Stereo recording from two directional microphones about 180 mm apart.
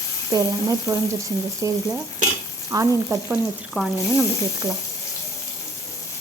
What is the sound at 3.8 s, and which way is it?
Speech, 5° left (ahead or behind).